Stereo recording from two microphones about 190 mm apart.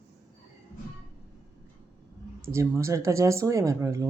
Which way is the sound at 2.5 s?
15° right (ahead or behind).